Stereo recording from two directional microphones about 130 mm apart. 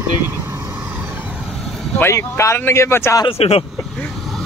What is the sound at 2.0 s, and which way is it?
Speech, 20° left (ahead or behind).